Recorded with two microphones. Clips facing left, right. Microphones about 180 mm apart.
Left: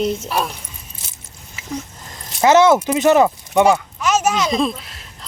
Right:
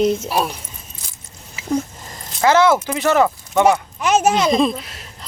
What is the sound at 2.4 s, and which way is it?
Speech, 20° left (ahead or behind).